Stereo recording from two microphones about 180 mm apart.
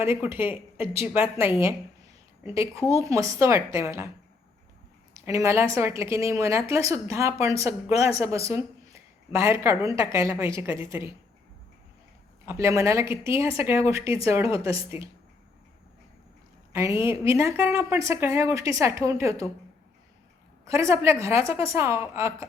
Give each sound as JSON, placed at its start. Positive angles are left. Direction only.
{"t": 0.0, "sound": "a woman's voice", "side_deg": -15}
{"t": 5.1, "sound": "a woman's voice", "side_deg": -15}
{"t": 12.5, "sound": "a woman's voice", "side_deg": -15}
{"t": 16.7, "sound": "a woman's voice", "side_deg": -15}
{"t": 20.7, "sound": "a woman's voice", "side_deg": -15}